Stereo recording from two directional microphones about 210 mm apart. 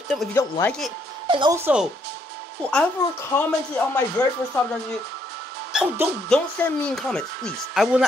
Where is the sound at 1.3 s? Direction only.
20° right (ahead or behind).